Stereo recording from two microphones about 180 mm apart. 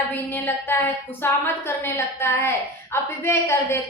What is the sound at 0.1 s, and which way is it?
A woman's voice, 10° left (ahead or behind).